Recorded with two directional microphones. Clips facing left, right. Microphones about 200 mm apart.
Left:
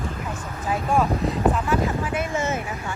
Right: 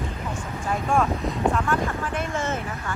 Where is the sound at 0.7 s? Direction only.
Centre (ahead or behind).